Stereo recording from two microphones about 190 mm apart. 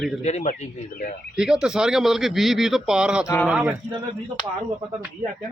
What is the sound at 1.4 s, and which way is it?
A man's voice, 5° right (ahead or behind).